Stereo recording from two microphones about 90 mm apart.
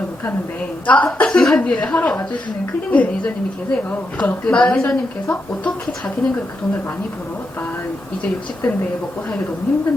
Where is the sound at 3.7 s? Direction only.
15° left (ahead or behind).